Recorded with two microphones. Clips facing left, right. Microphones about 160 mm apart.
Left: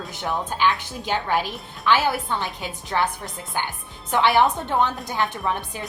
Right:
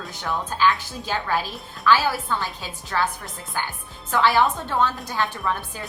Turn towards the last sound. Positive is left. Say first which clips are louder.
# left 1 dB
turn(degrees=20)  # may be behind; listen again after turning